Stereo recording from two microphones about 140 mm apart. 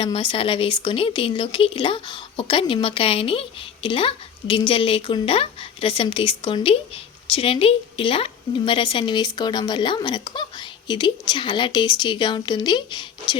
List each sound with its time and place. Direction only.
0.0 s speech: 40° left (ahead or behind)